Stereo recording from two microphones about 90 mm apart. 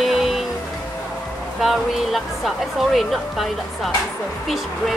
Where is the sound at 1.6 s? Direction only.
Centre (ahead or behind).